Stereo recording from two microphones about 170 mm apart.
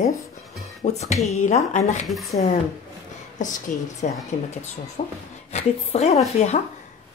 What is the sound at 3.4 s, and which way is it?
A woman's voice, 45° left (ahead or behind).